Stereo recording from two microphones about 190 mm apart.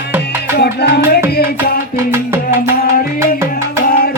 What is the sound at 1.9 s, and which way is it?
Music, 10° right (ahead or behind).